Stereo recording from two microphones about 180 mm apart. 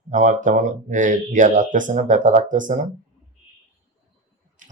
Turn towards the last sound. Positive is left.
turn(degrees=-45)  # may be behind; listen again after turning